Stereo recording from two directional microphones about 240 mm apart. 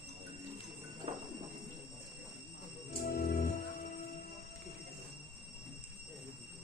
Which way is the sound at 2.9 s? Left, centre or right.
Left.